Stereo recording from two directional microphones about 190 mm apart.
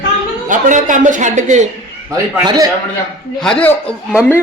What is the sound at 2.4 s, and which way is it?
Speech, 20° right (ahead or behind).